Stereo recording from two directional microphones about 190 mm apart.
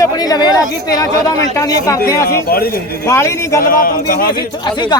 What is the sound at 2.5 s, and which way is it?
Speech, 55° left (ahead or behind).